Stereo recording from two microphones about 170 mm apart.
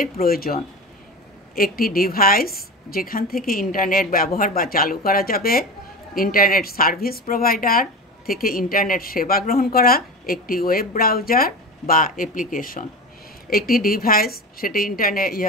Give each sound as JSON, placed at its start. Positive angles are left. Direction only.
{"t": 0.0, "sound": "speech", "side_deg": 60}